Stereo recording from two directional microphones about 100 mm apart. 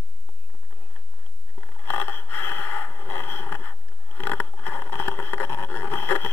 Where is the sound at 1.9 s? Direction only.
20° left (ahead or behind).